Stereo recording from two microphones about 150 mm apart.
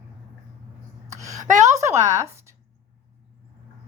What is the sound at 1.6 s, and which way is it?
Speech, 20° right (ahead or behind).